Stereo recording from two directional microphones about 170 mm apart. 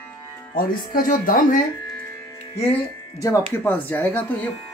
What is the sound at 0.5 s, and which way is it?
Speech, 55° left (ahead or behind).